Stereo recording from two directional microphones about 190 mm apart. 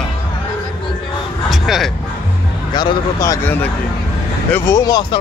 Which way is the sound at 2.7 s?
25° left (ahead or behind).